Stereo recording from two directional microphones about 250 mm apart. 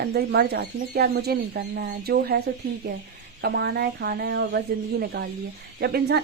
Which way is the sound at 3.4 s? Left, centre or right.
Right.